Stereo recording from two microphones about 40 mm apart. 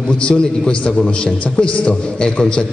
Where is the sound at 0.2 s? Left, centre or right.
Left.